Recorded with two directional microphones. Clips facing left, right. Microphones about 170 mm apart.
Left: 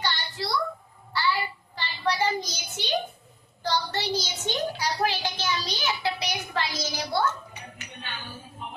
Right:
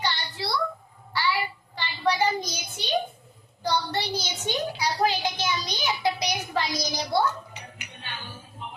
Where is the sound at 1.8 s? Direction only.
15° right (ahead or behind).